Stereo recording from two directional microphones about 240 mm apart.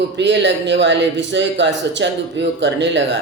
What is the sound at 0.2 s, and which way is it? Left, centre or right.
A man's voice, right.